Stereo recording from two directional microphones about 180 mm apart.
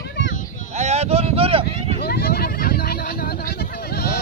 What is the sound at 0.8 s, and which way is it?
Speech, 35° right (ahead or behind).